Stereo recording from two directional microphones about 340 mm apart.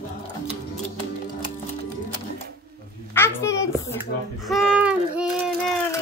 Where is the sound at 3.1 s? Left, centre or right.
Centre.